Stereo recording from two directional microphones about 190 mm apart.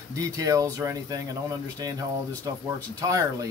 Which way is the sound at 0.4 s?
20° right (ahead or behind).